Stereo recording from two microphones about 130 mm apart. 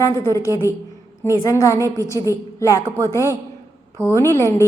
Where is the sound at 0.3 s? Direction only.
25° left (ahead or behind).